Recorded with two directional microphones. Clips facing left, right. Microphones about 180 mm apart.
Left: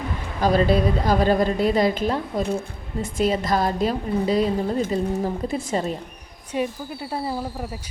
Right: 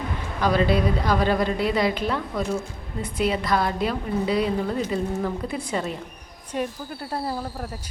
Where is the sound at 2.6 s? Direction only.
45° left (ahead or behind).